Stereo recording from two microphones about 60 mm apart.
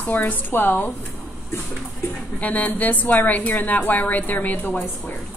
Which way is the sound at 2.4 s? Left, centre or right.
Left.